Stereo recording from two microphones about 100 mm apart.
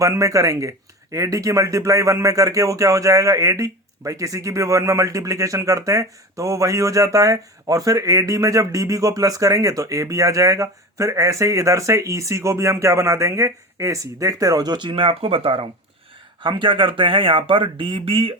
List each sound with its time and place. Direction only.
0.0 s speech: 30° right (ahead or behind); by 18.3 s 60° right (ahead or behind)